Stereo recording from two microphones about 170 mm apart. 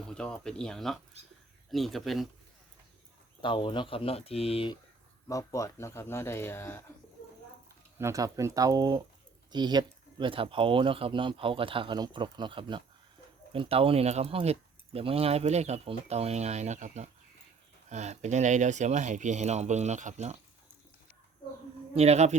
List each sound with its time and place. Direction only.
0.1 s speech: 5° left (ahead or behind)
3.4 s speech: 30° left (ahead or behind)
5.3 s speech: 20° left (ahead or behind)
7.9 s speech: 15° right (ahead or behind); by 20.4 s 40° right (ahead or behind)
21.9 s speech: 40° right (ahead or behind)